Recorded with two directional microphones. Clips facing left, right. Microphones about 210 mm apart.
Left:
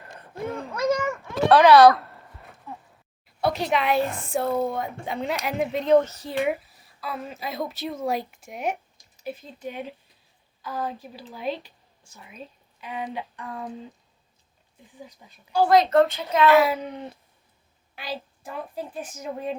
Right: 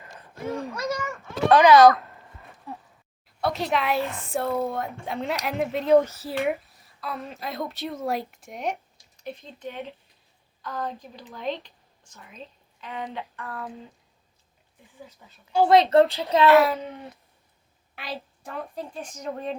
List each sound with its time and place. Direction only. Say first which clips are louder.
0.7 s a sound: left 6 dB; 50° left (ahead or behind)
1.5 s a woman's voice: left 1 dB; centre (ahead or behind)
3.4 s a woman's voice: left 2 dB; centre (ahead or behind); by 13.7 s 15° left (ahead or behind)
14.9 s speech: left 2 dB; 15° left (ahead or behind)
15.5 s a woman's voice: right 1 dB; 25° right (ahead or behind)
16.5 s a woman's voice: right 1 dB; centre (ahead or behind)
16.7 s speech: left 2 dB; 15° left (ahead or behind)
17.9 s a woman's voice: left 2 dB; centre (ahead or behind)